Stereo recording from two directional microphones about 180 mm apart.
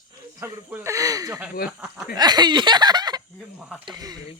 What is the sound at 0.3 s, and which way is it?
Speech, 15° right (ahead or behind).